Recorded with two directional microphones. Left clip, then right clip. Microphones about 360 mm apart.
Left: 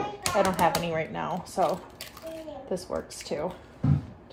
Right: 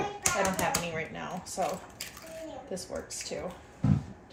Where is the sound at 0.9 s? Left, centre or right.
Centre.